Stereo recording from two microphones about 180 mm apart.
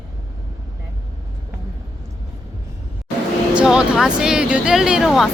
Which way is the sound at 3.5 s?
5° right (ahead or behind).